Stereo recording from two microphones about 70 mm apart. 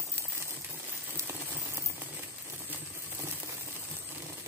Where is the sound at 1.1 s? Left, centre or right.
Right.